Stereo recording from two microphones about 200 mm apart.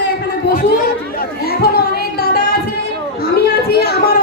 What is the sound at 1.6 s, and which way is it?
Music, 50° left (ahead or behind).